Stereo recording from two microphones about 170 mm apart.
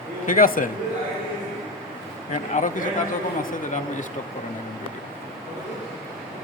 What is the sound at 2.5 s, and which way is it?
Speech, 50° left (ahead or behind).